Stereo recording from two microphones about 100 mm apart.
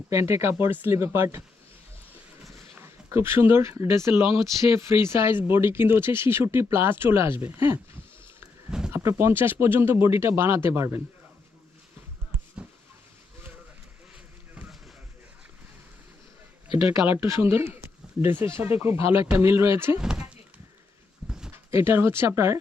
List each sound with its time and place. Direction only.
0.1 s speech: 30° right (ahead or behind)
2.7 s speech: 25° right (ahead or behind)
8.9 s speech: 25° right (ahead or behind)
16.6 s speech: 60° left (ahead or behind)
17.4 s speech: 25° right (ahead or behind)
20.0 s a sound: 5° right (ahead or behind)
21.5 s speech: 25° right (ahead or behind)